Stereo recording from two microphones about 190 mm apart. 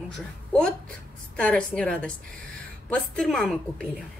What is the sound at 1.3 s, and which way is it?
A woman's voice, 5° left (ahead or behind).